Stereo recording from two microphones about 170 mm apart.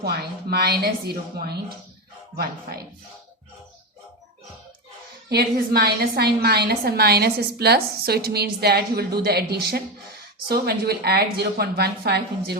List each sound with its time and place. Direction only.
0.0 s a woman's voice: 70° right (ahead or behind)
5.3 s a woman's voice: 65° right (ahead or behind)